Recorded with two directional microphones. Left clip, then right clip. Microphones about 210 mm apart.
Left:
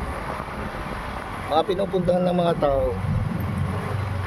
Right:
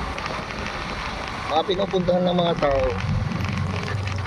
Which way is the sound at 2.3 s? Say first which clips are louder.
Even; 15° left (ahead or behind).